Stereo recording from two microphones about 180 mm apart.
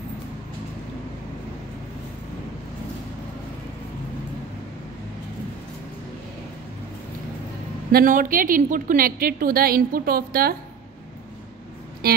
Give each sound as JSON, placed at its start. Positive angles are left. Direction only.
{"t": 7.9, "sound": "a woman's voice", "side_deg": -50}